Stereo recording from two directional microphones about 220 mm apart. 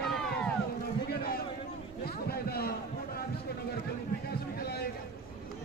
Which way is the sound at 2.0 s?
45° left (ahead or behind).